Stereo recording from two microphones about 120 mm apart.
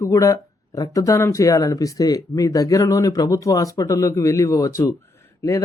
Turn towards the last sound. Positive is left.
turn(degrees=25)  # may be behind; listen again after turning